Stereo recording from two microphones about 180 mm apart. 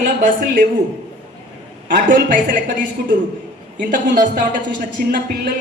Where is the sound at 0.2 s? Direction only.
50° right (ahead or behind).